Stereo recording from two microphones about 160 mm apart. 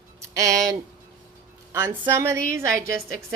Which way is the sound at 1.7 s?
15° right (ahead or behind).